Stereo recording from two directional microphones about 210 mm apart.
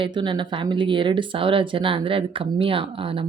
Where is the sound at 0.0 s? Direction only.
20° right (ahead or behind).